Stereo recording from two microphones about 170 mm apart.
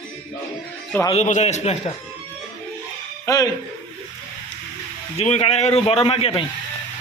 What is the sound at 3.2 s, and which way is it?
Speech, 20° left (ahead or behind).